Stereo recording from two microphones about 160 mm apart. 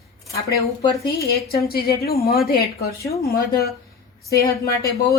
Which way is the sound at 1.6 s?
75° left (ahead or behind).